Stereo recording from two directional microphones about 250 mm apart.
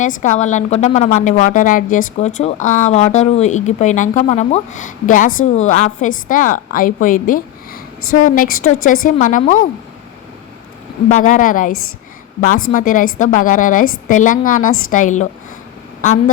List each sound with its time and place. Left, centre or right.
0.2 s a woman's voice: left
11.2 s a woman's voice: left